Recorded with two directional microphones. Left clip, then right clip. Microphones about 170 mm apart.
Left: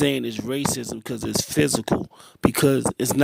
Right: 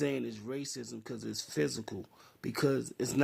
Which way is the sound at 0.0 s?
50° left (ahead or behind).